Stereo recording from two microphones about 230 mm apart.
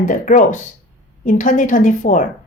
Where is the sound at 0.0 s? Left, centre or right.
Left.